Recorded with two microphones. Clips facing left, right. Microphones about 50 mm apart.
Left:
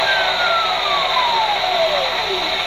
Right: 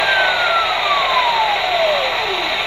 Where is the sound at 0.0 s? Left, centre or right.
Centre.